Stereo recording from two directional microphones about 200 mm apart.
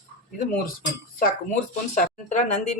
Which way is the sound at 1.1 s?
40° left (ahead or behind).